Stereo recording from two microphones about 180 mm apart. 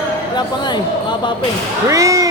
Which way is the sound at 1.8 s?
15° right (ahead or behind).